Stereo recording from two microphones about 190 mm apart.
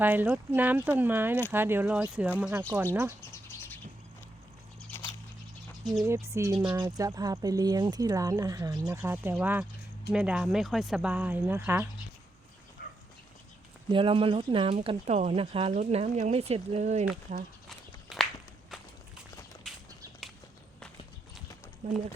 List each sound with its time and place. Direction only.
0.0 s speech: 10° right (ahead or behind)
4.8 s a sound: 10° left (ahead or behind)
6.0 s speech: 15° right (ahead or behind)
13.9 s speech: 30° right (ahead or behind)
17.7 s walk: centre (ahead or behind)
21.8 s speech: 35° right (ahead or behind)